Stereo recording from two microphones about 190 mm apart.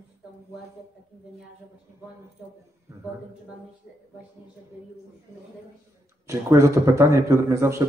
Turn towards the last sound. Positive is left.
turn(degrees=-15)  # may be behind; listen again after turning